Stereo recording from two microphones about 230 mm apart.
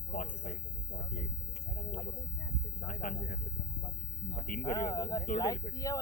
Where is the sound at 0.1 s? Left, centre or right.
Left.